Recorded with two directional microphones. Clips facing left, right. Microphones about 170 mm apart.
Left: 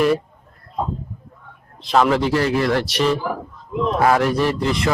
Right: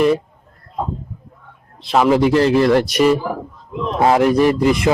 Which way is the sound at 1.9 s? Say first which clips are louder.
Right 3 dB; 5° right (ahead or behind).